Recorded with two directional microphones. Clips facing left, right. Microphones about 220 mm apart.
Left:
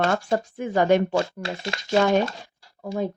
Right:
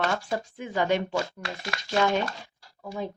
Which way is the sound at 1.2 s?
25° left (ahead or behind).